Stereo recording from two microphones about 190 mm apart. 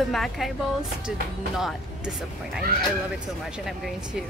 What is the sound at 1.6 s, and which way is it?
Speech, centre (ahead or behind).